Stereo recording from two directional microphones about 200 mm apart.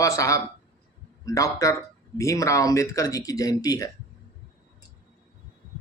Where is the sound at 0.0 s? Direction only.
15° left (ahead or behind).